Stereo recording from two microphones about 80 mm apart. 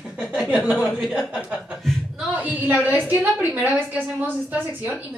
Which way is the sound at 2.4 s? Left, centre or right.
Right.